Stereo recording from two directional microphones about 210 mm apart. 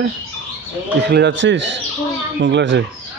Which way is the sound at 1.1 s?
55° right (ahead or behind).